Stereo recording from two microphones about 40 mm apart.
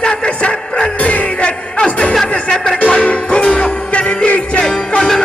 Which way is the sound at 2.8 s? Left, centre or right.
Left.